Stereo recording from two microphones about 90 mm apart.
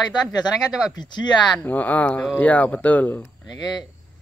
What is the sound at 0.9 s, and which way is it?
Speech, 55° left (ahead or behind).